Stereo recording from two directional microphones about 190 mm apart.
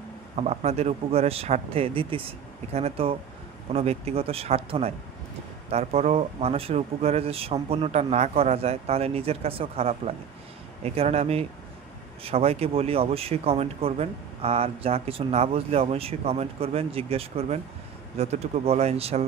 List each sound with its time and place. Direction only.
0.4 s speech: 35° right (ahead or behind)